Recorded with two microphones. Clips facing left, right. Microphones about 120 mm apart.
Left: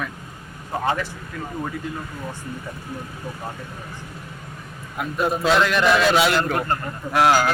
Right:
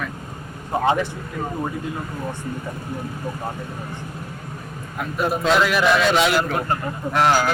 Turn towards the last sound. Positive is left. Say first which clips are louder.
# left 1 dB
turn(degrees=10)  # may be behind; listen again after turning